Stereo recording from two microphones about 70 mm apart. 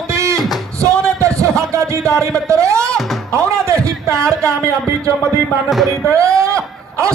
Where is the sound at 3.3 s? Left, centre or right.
Right.